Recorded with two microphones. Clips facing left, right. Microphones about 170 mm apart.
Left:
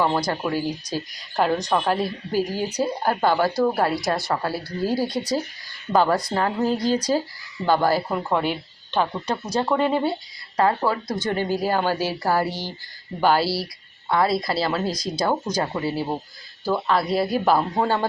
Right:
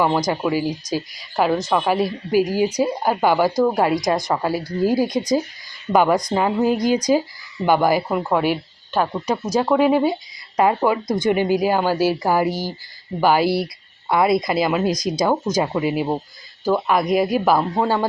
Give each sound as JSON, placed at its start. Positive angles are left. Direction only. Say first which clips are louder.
{"t": 0.3, "sound": "speech", "louder": "right 4 dB", "side_deg": -10}